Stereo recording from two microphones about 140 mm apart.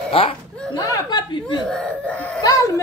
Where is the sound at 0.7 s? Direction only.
25° left (ahead or behind).